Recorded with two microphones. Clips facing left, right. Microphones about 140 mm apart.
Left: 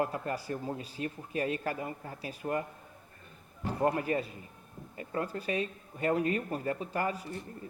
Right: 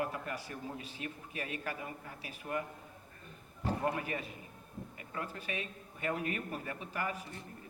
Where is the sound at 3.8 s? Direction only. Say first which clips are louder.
Left 11 dB; 40° left (ahead or behind).